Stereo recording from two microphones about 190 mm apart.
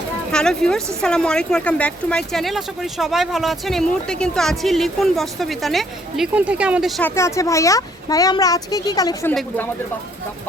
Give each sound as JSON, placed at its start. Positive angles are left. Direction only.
{"t": 0.3, "sound": "speech", "side_deg": 5}
{"t": 7.2, "sound": "speech", "side_deg": 15}